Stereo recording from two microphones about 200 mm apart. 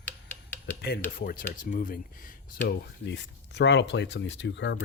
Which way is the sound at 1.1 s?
45° left (ahead or behind).